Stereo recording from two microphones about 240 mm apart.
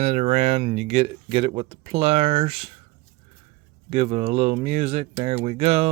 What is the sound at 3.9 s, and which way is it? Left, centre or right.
Speech, right.